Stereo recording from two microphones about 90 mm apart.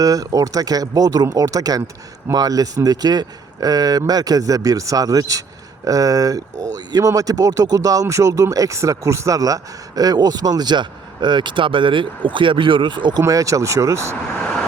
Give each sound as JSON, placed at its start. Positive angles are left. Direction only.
{"t": 0.0, "sound": "speech", "side_deg": -40}
{"t": 13.2, "sound": "speech", "side_deg": -35}